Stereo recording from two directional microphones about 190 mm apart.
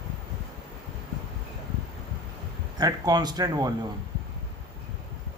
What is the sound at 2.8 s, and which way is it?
Speech, 20° right (ahead or behind).